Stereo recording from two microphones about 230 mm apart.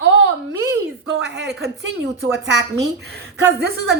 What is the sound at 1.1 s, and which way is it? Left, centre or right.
A woman's voice, right.